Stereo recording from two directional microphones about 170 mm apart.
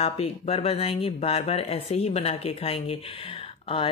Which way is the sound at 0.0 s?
35° left (ahead or behind).